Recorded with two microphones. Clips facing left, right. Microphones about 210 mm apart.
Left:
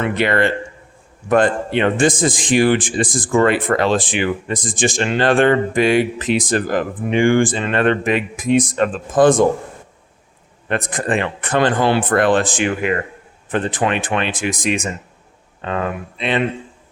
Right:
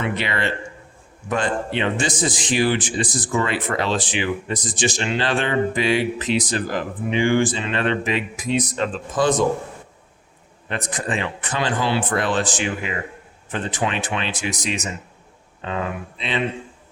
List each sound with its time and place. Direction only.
0.0 s a man's voice: 50° left (ahead or behind)
10.7 s speech: 55° left (ahead or behind)